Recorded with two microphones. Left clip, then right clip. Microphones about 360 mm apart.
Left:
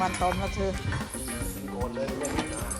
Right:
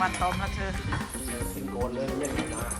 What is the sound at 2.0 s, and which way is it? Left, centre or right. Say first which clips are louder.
Music: even; centre.